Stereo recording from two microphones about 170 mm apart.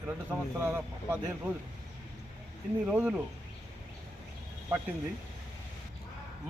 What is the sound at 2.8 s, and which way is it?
Speech, 10° right (ahead or behind).